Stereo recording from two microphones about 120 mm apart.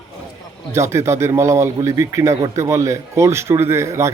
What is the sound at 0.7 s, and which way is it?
Speech, 25° right (ahead or behind).